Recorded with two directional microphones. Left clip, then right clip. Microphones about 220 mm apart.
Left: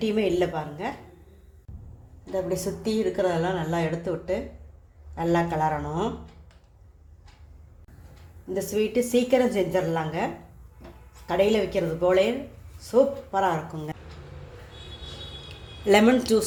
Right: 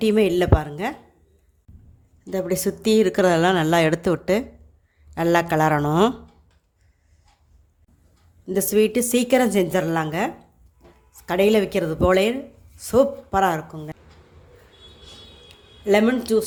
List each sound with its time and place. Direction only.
0.0 s speech: 35° right (ahead or behind)
2.3 s speech: 45° right (ahead or behind)
8.4 s speech: 40° right (ahead or behind)
15.4 s a sound: 15° right (ahead or behind)